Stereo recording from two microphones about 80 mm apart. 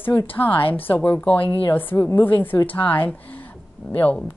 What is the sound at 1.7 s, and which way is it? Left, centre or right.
A woman's voice, left.